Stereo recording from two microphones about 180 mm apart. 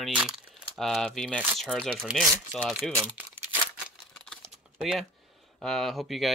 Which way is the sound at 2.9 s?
15° right (ahead or behind).